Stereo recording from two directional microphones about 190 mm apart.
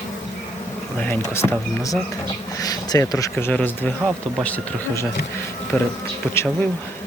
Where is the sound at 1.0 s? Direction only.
10° left (ahead or behind).